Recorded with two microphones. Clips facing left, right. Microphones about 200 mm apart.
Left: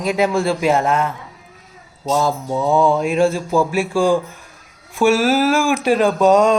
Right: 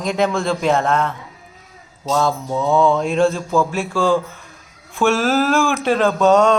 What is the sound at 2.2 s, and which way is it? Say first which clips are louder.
Speech: right 1 dB; 5° left (ahead or behind).